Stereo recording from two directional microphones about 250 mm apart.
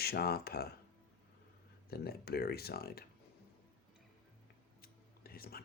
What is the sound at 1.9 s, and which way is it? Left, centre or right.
Speech, left.